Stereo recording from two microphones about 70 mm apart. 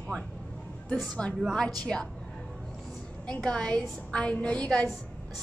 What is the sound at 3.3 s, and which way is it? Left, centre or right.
A woman's voice, centre.